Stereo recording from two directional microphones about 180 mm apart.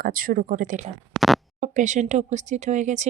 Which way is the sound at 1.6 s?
45° right (ahead or behind).